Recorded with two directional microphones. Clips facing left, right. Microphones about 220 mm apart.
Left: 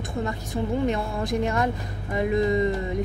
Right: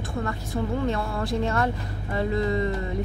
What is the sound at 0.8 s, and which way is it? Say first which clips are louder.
Speech: left 1 dB; 15° left (ahead or behind).